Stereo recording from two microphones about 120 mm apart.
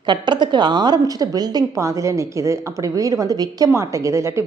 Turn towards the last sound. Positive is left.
turn(degrees=-25)  # may be behind; listen again after turning